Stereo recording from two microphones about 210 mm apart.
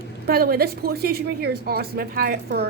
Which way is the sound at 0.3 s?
45° right (ahead or behind).